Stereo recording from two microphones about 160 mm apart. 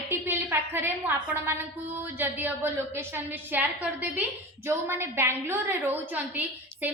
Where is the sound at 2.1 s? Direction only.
15° right (ahead or behind).